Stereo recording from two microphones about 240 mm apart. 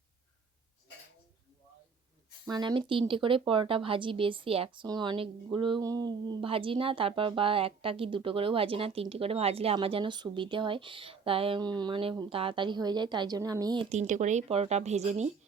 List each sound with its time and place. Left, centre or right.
2.5 s speech: centre
13.9 s speech: right